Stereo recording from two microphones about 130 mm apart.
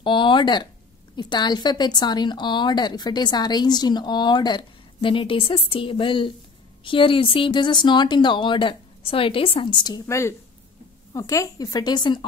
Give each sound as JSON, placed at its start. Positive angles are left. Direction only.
{"t": 0.0, "sound": "a woman's voice", "side_deg": 40}